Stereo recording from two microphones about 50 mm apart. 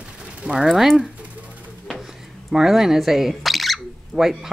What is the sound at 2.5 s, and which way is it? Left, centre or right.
Speech, centre.